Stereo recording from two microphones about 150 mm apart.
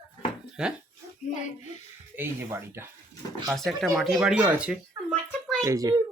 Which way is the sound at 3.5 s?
5° left (ahead or behind).